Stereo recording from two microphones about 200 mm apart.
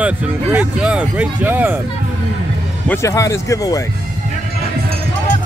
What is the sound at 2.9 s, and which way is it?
Speech, 15° left (ahead or behind).